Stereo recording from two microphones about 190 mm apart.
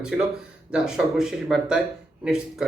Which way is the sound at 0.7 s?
5° right (ahead or behind).